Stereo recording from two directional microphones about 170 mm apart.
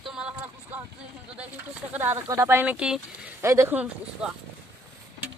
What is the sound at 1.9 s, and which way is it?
Speech, 15° right (ahead or behind).